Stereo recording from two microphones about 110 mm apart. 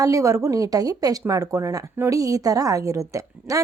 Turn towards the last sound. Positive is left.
turn(degrees=-30)  # may be behind; listen again after turning